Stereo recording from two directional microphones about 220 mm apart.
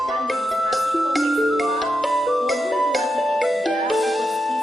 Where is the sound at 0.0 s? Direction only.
Centre (ahead or behind).